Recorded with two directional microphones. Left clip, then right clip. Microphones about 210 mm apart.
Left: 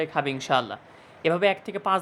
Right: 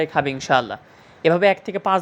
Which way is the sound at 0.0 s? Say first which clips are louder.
Right 5 dB; 15° right (ahead or behind).